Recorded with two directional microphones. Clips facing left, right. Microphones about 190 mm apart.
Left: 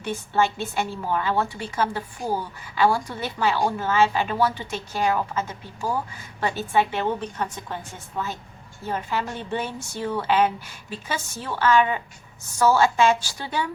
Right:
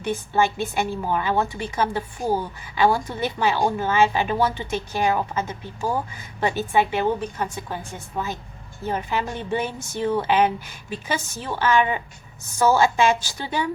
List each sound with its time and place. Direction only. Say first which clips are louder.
0.0 s a woman's voice: right 2 dB; 15° right (ahead or behind)